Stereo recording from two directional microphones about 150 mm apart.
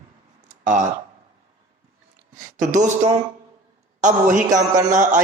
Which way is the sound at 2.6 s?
55° right (ahead or behind).